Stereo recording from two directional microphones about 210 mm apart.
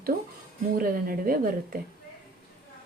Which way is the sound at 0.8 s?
45° right (ahead or behind).